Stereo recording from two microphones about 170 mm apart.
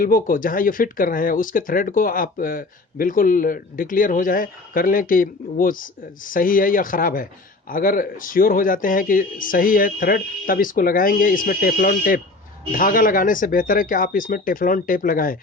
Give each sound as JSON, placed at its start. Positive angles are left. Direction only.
{"t": 0.0, "sound": "speech", "side_deg": 55}